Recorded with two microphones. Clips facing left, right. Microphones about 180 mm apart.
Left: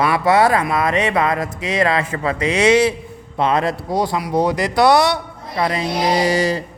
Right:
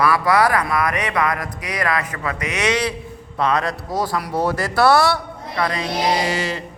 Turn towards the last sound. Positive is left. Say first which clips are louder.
# left 5 dB
turn(degrees=40)  # may be behind; listen again after turning